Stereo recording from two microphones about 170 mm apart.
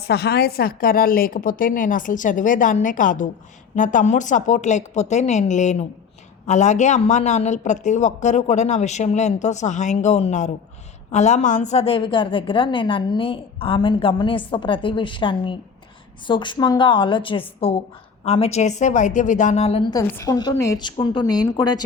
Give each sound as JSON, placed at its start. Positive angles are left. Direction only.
{"t": 0.0, "sound": "a woman's voice", "side_deg": 70}
{"t": 19.9, "sound": "a woman's voice", "side_deg": 20}